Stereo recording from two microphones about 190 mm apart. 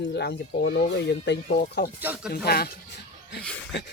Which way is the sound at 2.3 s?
55° left (ahead or behind).